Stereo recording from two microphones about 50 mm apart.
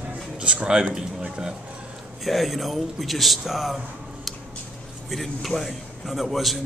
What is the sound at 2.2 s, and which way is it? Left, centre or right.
A man's voice, centre.